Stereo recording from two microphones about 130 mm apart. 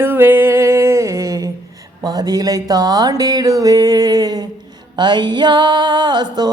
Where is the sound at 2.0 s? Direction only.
30° right (ahead or behind).